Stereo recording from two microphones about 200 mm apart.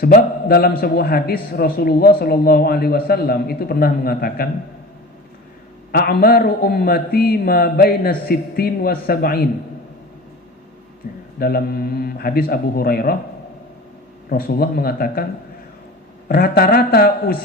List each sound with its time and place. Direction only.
0.0 s a man's voice: 50° left (ahead or behind)
5.9 s a man's voice: 50° left (ahead or behind)
11.0 s a man's voice: 45° left (ahead or behind)
14.3 s a man's voice: 50° left (ahead or behind)
16.3 s a man's voice: 50° left (ahead or behind)